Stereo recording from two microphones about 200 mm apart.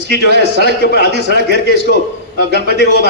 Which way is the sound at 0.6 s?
55° left (ahead or behind).